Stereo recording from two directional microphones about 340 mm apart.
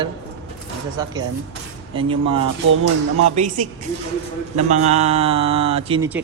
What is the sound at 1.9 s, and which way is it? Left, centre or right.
Speech, centre.